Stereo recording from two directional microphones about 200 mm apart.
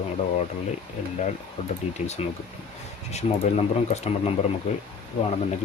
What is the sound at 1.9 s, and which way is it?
Speech, 35° left (ahead or behind).